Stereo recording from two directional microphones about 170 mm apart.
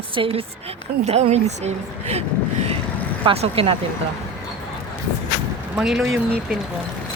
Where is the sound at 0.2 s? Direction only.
35° right (ahead or behind).